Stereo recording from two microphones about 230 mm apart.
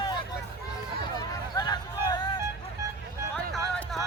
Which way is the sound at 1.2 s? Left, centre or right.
Centre.